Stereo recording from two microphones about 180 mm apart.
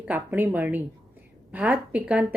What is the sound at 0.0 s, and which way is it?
A woman's voice, 10° right (ahead or behind).